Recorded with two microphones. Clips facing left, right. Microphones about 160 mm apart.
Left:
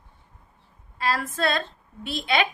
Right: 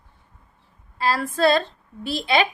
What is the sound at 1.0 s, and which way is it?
A woman's voice, 35° right (ahead or behind).